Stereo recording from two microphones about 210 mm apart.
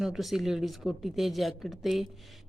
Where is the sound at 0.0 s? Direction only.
Centre (ahead or behind).